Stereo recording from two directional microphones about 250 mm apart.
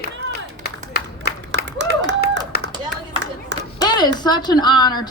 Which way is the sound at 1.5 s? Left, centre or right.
Right.